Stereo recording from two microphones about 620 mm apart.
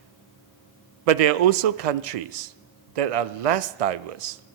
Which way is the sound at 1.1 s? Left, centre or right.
Right.